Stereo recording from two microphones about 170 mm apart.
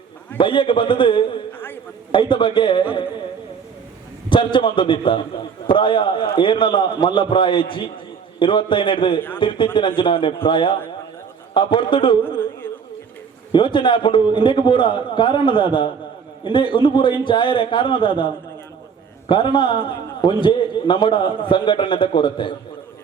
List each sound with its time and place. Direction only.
0.3 s a man's voice: 30° left (ahead or behind)
1.5 s a sound: 10° left (ahead or behind)
2.1 s a man's voice: 30° left (ahead or behind)
4.3 s a man's voice: 30° left (ahead or behind)
12.6 s a sound: 10° left (ahead or behind)
13.5 s a man's voice: 30° left (ahead or behind)
19.3 s a man's voice: 30° left (ahead or behind)